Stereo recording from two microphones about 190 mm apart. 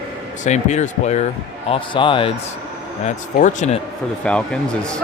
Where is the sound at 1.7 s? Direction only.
25° left (ahead or behind).